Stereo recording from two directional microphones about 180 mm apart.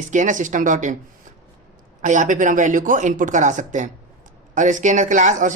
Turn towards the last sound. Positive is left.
turn(degrees=-45)  # may be behind; listen again after turning